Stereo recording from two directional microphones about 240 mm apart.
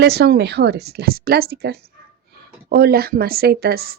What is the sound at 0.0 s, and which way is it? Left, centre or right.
A woman's voice, right.